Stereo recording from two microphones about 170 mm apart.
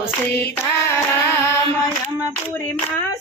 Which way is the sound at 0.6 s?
15° left (ahead or behind).